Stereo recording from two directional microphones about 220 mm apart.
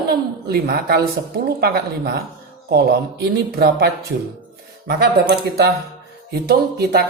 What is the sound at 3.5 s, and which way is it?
Speech, 45° right (ahead or behind).